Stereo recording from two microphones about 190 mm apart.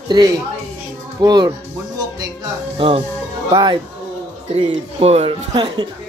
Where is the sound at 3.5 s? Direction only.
20° right (ahead or behind).